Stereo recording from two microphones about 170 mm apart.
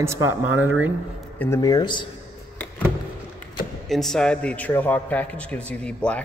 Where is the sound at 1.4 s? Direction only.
20° left (ahead or behind).